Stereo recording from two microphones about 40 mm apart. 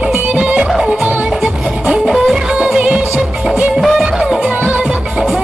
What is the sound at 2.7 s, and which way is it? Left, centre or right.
Music, right.